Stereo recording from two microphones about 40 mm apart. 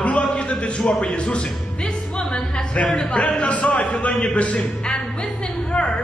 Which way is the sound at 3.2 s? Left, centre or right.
Left.